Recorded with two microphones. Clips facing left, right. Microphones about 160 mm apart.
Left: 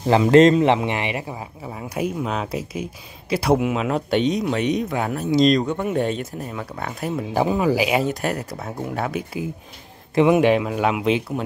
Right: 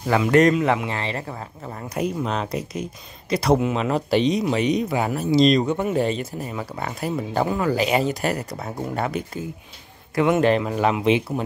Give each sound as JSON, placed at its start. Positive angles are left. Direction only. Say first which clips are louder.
{"t": 0.0, "sound": "speech", "louder": "left 4 dB", "side_deg": 30}
{"t": 1.7, "sound": "speech", "louder": "even", "side_deg": 5}
{"t": 7.4, "sound": "speech", "louder": "left 3 dB", "side_deg": 15}
{"t": 10.1, "sound": "speech", "louder": "left 3 dB", "side_deg": 15}